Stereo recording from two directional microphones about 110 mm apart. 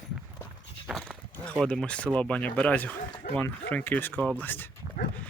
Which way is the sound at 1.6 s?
5° left (ahead or behind).